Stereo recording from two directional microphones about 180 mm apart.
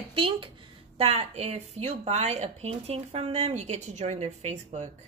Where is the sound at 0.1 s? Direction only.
30° right (ahead or behind).